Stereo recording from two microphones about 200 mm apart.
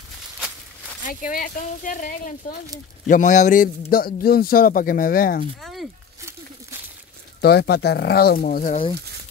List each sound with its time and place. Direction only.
1.0 s speech: 40° left (ahead or behind)
5.6 s a sound: centre (ahead or behind)
7.4 s speech: 55° left (ahead or behind)